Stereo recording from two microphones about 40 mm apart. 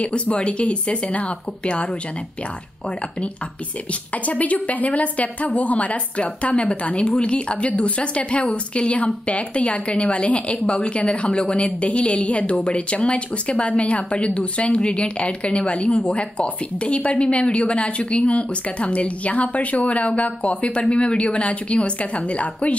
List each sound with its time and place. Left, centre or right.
0.0 s speech: left
4.1 s a woman's voice: left